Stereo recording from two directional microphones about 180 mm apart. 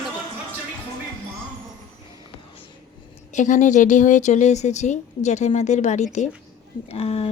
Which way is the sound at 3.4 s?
45° left (ahead or behind).